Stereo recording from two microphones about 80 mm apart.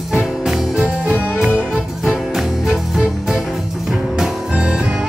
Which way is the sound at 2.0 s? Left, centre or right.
Centre.